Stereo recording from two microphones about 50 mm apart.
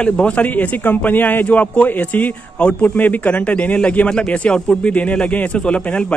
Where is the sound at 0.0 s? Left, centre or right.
Left.